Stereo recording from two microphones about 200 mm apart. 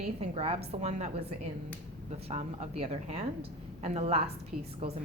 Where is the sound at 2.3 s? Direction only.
35° right (ahead or behind).